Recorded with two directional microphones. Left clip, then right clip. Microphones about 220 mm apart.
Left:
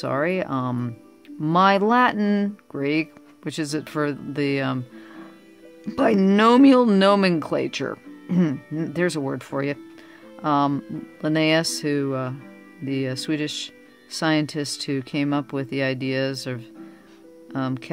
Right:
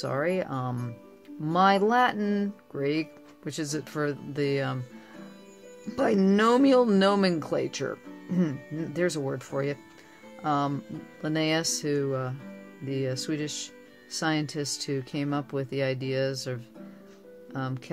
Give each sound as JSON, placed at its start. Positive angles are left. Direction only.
{"t": 0.0, "sound": "speech", "side_deg": 35}
{"t": 5.9, "sound": "speech", "side_deg": 35}